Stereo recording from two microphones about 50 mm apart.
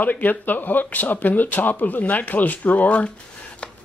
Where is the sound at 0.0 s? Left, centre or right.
Left.